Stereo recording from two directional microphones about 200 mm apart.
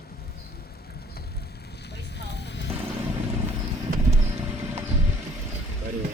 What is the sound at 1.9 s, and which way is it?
Vehicle, 55° left (ahead or behind).